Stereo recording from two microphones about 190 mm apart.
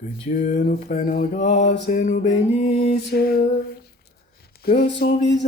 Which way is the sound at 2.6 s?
30° left (ahead or behind).